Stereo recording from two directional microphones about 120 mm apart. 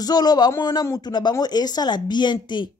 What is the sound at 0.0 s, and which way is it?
A woman's voice, 35° left (ahead or behind).